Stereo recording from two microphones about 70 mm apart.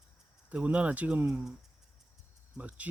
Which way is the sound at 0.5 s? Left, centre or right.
Centre.